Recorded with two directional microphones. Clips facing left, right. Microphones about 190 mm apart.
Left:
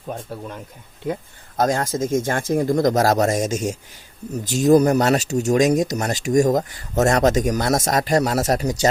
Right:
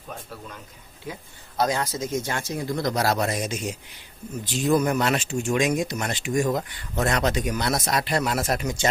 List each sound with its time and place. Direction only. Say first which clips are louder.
1.0 s speech: left 11 dB; 50° left (ahead or behind)